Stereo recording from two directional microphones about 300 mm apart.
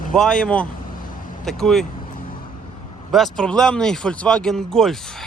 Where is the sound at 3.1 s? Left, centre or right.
Centre.